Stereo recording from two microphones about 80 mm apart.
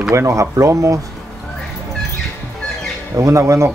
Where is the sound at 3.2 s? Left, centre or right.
Right.